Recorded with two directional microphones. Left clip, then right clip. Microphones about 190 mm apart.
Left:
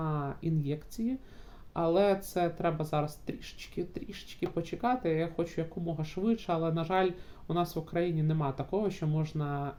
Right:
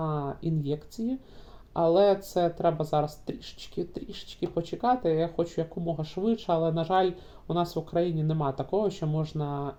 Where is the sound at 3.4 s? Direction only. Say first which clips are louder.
Right 3 dB; 40° left (ahead or behind).